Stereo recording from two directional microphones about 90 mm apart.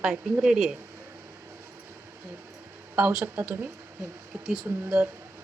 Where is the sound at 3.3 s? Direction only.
20° right (ahead or behind).